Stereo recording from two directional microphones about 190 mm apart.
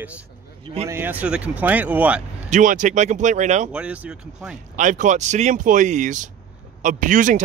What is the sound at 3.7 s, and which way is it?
Speech, 5° right (ahead or behind).